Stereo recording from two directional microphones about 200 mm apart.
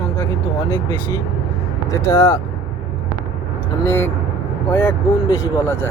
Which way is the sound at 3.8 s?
10° left (ahead or behind).